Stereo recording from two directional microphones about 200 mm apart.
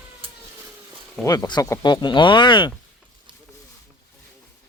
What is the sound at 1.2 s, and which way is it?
Speech, 20° left (ahead or behind).